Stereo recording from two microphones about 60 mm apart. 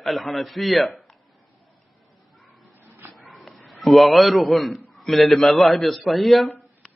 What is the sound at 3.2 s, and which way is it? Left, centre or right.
A man's voice, centre.